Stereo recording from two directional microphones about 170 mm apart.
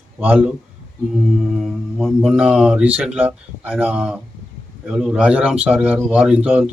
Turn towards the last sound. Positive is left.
turn(degrees=-5)  # may be behind; listen again after turning